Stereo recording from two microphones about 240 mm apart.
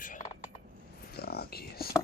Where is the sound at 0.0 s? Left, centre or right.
Left.